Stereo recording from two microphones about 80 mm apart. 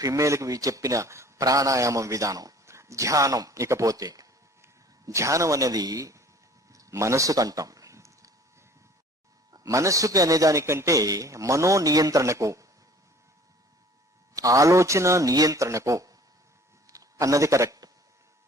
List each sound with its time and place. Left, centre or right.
0.0 s a man's voice: right
4.6 s a man's voice: right
6.7 s a sound: right
9.5 s a man's voice: right
14.3 s a man's voice: right
16.8 s a sound: right